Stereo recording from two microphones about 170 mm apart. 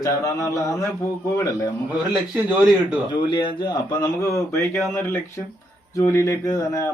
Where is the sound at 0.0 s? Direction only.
20° left (ahead or behind).